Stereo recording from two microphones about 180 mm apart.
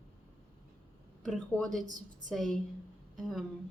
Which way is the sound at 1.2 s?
Centre (ahead or behind).